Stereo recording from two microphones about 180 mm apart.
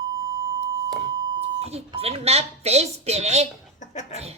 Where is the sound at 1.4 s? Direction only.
35° right (ahead or behind).